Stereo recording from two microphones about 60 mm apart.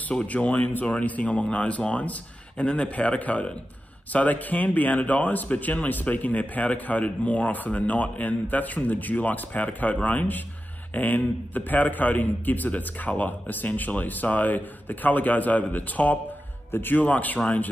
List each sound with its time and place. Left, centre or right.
0.3 s a man's voice: left